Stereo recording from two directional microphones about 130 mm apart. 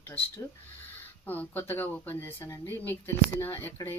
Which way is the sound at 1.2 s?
15° left (ahead or behind).